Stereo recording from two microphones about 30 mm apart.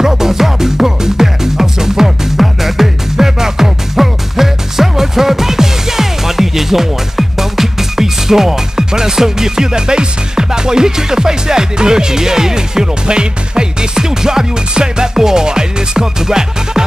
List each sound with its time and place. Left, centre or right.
0.0 s music: centre
13.0 s speech: right